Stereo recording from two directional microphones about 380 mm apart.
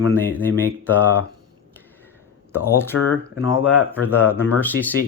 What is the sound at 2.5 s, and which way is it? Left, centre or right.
Speech, centre.